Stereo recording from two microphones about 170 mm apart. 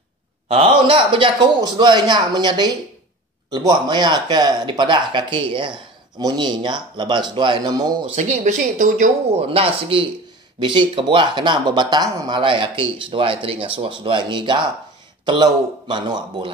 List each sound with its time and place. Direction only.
0.5 s speech: 35° right (ahead or behind)
8.2 s speech: 45° right (ahead or behind); by 16.5 s 30° right (ahead or behind)